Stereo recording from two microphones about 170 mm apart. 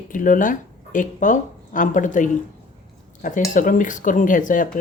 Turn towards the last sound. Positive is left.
turn(degrees=50)  # may be behind; listen again after turning